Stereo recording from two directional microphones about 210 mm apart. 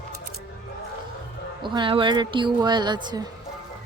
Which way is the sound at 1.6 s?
20° right (ahead or behind).